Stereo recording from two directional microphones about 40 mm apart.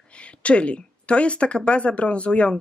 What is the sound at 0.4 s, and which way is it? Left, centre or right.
Speech, left.